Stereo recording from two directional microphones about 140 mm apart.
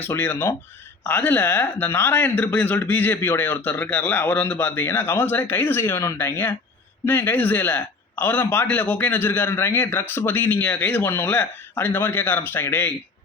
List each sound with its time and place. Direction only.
0.0 s a man's voice: 15° left (ahead or behind)